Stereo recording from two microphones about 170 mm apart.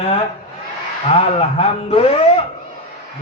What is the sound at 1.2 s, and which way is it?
A man's voice, 35° left (ahead or behind).